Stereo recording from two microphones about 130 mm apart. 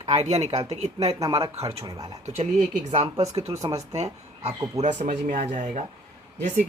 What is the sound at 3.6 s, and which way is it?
Speech, 25° right (ahead or behind).